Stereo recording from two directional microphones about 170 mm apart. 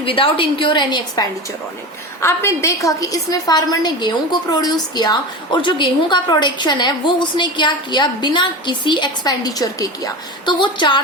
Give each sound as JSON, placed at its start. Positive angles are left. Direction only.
{"t": 0.0, "sound": "a woman's voice", "side_deg": 30}